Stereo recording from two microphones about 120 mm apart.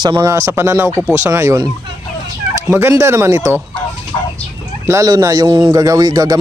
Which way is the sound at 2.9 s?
25° right (ahead or behind).